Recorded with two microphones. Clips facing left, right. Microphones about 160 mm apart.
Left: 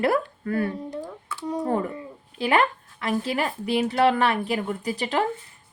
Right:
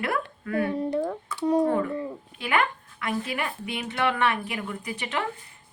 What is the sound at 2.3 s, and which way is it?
A woman's voice, 35° left (ahead or behind).